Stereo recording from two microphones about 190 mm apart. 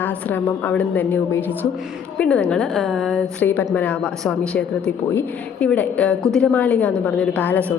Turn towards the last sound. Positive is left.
turn(degrees=10)  # may be behind; listen again after turning